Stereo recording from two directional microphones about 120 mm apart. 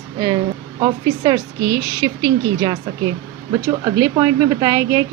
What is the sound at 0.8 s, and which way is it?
A woman's voice, 35° right (ahead or behind).